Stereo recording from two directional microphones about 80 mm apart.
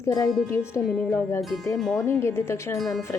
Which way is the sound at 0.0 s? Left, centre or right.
Left.